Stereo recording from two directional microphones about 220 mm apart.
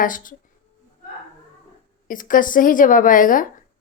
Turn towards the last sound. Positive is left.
turn(degrees=35)  # may be behind; listen again after turning